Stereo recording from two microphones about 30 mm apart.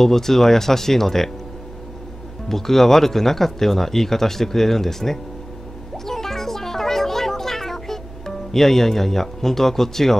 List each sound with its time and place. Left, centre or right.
0.0 s speech: centre
2.5 s speech: centre
6.0 s music: centre